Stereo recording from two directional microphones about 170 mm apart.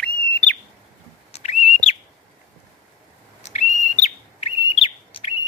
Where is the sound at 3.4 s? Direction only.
45° left (ahead or behind).